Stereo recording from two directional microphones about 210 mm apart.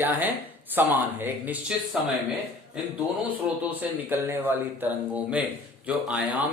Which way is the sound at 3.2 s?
10° right (ahead or behind).